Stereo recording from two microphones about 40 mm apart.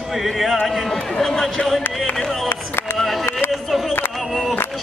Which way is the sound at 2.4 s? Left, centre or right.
Left.